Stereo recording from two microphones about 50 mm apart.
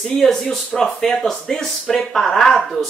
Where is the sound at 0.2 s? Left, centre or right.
Centre.